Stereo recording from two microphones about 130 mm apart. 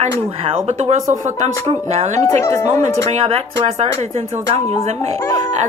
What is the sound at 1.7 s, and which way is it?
Speech, 55° right (ahead or behind).